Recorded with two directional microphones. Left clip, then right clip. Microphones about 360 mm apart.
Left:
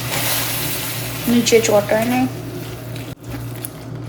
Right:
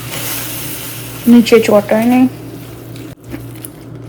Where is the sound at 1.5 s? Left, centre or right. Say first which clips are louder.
Right 2 dB; right.